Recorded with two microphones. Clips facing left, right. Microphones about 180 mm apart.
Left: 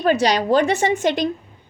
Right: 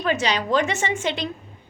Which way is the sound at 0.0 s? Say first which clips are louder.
Left 6 dB; 40° left (ahead or behind).